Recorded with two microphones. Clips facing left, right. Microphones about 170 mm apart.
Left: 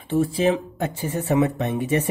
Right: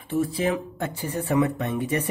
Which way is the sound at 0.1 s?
25° left (ahead or behind).